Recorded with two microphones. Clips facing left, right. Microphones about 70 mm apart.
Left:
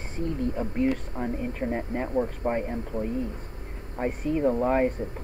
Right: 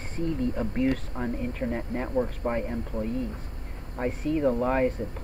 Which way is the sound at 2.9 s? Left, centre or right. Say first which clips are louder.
Left 2 dB; left.